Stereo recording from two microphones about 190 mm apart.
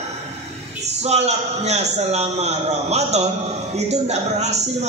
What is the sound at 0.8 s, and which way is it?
A man's voice, 35° right (ahead or behind).